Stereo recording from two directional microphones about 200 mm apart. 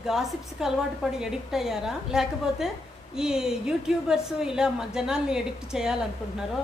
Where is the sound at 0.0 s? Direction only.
Centre (ahead or behind).